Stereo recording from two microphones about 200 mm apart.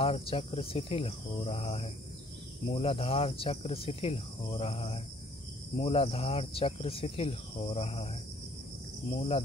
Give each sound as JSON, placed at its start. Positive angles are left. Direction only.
{"t": 0.0, "sound": "speech", "side_deg": 30}